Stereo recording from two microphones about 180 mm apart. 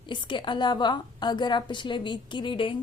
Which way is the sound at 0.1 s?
25° left (ahead or behind).